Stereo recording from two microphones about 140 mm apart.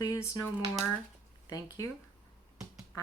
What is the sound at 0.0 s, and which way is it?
Speech, 25° left (ahead or behind).